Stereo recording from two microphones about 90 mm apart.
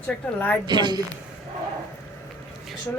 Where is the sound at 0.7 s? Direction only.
55° right (ahead or behind).